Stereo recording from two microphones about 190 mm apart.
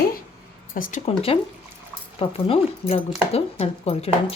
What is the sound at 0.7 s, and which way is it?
Speech, 45° left (ahead or behind).